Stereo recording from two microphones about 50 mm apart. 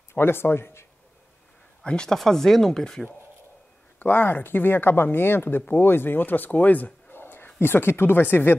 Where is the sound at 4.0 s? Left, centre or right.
Left.